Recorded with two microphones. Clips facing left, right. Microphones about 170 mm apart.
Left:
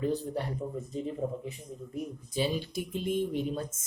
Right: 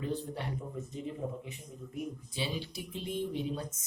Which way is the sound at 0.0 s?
40° left (ahead or behind).